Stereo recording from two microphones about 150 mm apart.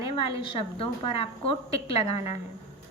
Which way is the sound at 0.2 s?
35° left (ahead or behind).